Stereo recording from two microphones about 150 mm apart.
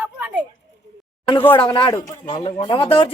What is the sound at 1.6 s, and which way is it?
Speech, 35° left (ahead or behind).